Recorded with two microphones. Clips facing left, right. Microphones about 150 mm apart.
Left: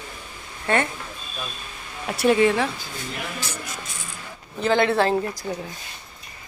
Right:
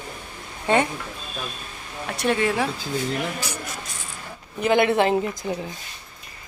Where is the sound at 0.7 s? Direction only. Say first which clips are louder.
Right 2 dB; 15° right (ahead or behind).